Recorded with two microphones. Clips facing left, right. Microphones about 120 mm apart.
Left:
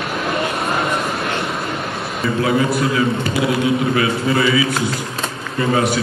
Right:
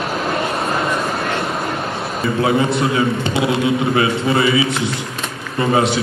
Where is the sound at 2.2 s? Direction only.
25° right (ahead or behind).